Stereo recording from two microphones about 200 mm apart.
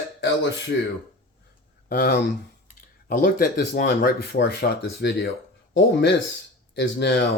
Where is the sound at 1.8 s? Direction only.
50° left (ahead or behind).